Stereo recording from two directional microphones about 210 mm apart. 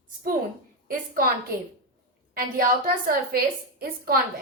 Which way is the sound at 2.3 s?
45° right (ahead or behind).